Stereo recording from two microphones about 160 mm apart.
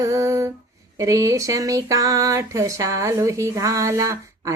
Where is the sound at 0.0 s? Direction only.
20° right (ahead or behind).